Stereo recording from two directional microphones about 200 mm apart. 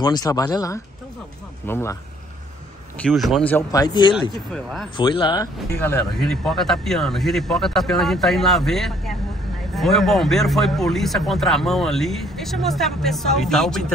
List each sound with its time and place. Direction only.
0.0 s speech: 20° left (ahead or behind)
3.0 s speech: centre (ahead or behind); by 4.3 s 20° left (ahead or behind)
4.6 s speech: centre (ahead or behind)
4.9 s speech: 25° left (ahead or behind); by 13.9 s centre (ahead or behind)